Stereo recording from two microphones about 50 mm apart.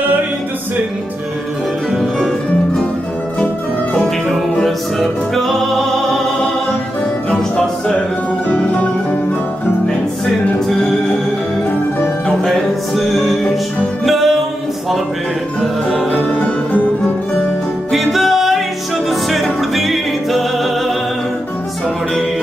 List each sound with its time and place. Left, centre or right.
4.6 s music: centre
7.2 s music: left
9.8 s music: centre
12.9 s music: centre
15.6 s music: centre
16.1 s music: left
17.9 s music: centre